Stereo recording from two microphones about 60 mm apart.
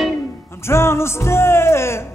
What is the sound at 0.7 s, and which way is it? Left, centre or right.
Music, left.